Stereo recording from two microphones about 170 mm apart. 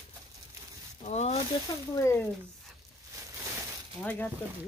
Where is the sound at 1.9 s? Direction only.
15° left (ahead or behind).